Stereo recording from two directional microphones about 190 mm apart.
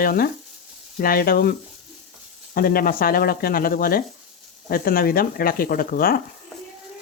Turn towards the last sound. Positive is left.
turn(degrees=50)  # may be behind; listen again after turning